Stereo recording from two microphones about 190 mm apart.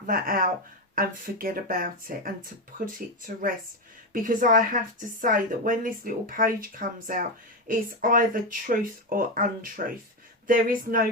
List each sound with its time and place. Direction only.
0.0 s a woman's voice: 45° right (ahead or behind)